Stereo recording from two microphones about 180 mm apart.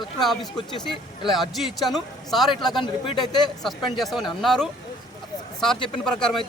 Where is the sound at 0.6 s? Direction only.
25° left (ahead or behind).